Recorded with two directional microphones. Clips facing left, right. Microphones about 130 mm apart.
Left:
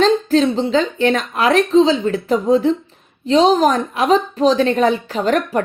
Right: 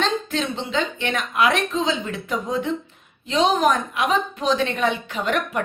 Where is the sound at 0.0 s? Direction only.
35° left (ahead or behind).